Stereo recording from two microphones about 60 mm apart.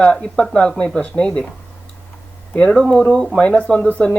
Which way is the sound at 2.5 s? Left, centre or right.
Centre.